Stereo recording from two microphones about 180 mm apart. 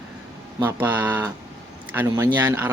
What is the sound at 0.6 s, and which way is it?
Speech, 10° right (ahead or behind).